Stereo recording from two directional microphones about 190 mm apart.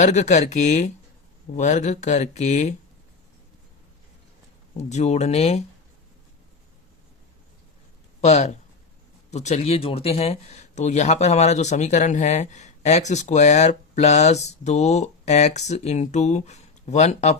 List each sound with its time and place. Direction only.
0.0 s speech: 40° left (ahead or behind)
4.8 s speech: 35° left (ahead or behind)
8.2 s speech: 35° left (ahead or behind)